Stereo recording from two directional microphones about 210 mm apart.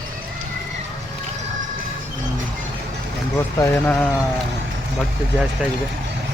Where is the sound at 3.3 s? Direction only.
10° left (ahead or behind).